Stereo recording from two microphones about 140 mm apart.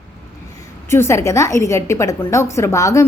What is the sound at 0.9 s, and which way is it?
A woman's voice, 20° left (ahead or behind).